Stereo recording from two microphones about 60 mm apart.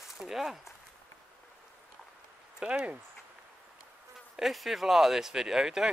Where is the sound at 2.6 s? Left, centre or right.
Centre.